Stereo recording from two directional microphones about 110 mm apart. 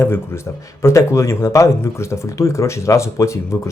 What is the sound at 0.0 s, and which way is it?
Speech, 25° left (ahead or behind).